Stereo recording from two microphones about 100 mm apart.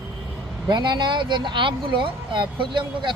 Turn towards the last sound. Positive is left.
turn(degrees=-55)  # may be behind; listen again after turning